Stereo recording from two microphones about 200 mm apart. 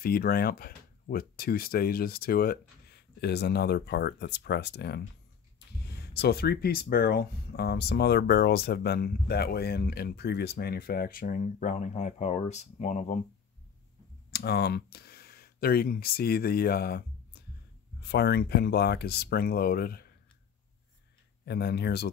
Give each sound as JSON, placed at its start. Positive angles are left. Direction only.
{"t": 0.0, "sound": "speech", "side_deg": 50}
{"t": 14.3, "sound": "speech", "side_deg": 55}
{"t": 21.5, "sound": "speech", "side_deg": 55}